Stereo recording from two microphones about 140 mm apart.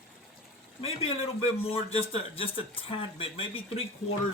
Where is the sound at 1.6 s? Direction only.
45° left (ahead or behind).